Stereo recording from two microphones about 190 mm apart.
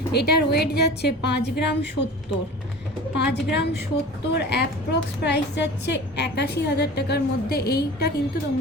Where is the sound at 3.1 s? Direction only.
65° left (ahead or behind).